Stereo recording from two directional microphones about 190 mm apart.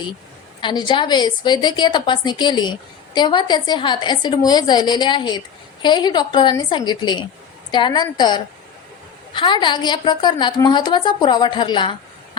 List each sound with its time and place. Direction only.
0.6 s a woman's voice: 25° left (ahead or behind)